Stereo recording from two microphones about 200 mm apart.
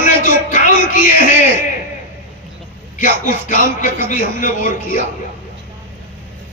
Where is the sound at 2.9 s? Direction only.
40° left (ahead or behind).